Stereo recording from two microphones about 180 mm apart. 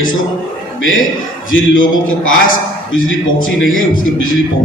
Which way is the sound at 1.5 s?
90° left.